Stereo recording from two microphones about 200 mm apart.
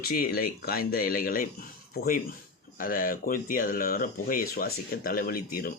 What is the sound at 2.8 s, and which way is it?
Speech, 45° left (ahead or behind).